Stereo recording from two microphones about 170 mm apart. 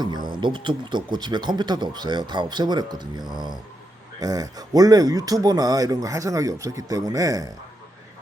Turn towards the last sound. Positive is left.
turn(degrees=-20)  # may be behind; listen again after turning